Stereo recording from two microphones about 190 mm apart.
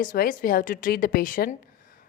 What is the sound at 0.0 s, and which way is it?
Speech, 45° left (ahead or behind).